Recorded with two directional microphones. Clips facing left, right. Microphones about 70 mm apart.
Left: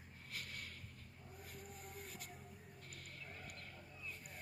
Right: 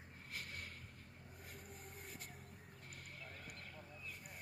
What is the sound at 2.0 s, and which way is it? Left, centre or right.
Music, right.